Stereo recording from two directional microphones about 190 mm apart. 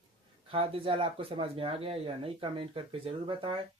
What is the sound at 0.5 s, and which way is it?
Speech, 30° right (ahead or behind).